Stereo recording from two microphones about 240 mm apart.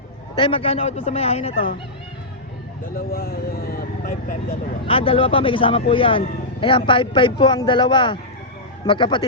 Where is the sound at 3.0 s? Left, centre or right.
Left.